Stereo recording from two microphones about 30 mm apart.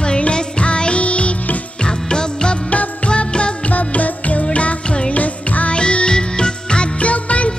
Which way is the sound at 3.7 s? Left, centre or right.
Left.